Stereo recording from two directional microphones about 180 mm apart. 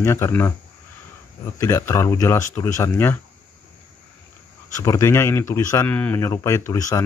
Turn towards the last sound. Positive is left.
turn(degrees=15)  # may be behind; listen again after turning